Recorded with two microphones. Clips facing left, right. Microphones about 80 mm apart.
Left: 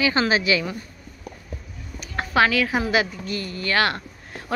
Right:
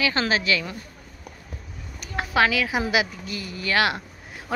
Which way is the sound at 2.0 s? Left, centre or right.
Centre.